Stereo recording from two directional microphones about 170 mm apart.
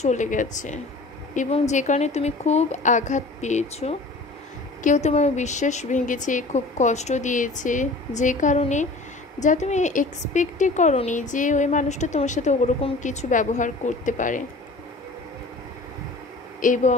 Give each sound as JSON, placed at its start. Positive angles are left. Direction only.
{"t": 0.0, "sound": "a woman's voice", "side_deg": 45}
{"t": 16.6, "sound": "a woman's voice", "side_deg": 50}